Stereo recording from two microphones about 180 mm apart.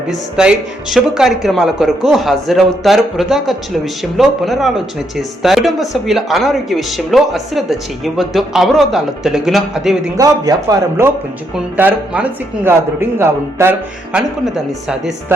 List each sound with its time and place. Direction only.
0.1 s speech: 5° right (ahead or behind)
10.2 s a man's voice: 20° right (ahead or behind)
14.4 s speech: centre (ahead or behind)